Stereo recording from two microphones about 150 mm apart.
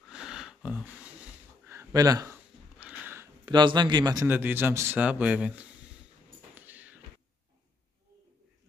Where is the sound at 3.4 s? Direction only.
30° right (ahead or behind).